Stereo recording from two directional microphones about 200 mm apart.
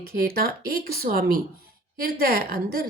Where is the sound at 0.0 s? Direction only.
50° right (ahead or behind).